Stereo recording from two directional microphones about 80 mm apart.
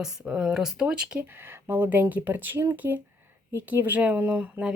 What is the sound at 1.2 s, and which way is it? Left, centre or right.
Speech, right.